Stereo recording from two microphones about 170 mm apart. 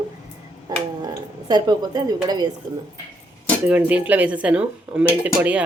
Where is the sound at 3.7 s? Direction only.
10° right (ahead or behind).